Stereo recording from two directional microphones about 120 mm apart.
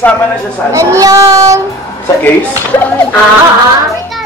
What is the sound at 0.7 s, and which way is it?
Speech, 25° right (ahead or behind).